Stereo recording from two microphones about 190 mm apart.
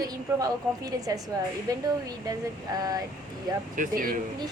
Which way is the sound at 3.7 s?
45° right (ahead or behind).